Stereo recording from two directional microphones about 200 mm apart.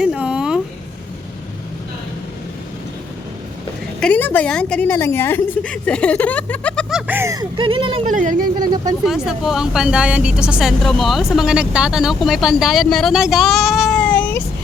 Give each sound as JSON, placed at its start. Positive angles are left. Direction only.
{"t": 0.0, "sound": "a sound", "side_deg": -5}
{"t": 4.0, "sound": "a woman's voice", "side_deg": 10}
{"t": 7.1, "sound": "speech", "side_deg": -15}
{"t": 8.0, "sound": "speech", "side_deg": -40}
{"t": 8.5, "sound": "speech", "side_deg": -20}
{"t": 9.0, "sound": "speech", "side_deg": 0}